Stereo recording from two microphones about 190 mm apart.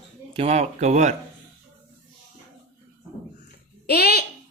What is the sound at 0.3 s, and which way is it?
Speech, 35° right (ahead or behind).